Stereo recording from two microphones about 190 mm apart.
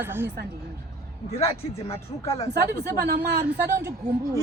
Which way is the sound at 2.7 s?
60° right (ahead or behind).